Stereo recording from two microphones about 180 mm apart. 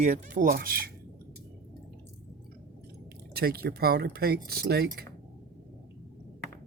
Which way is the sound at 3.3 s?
60° right (ahead or behind).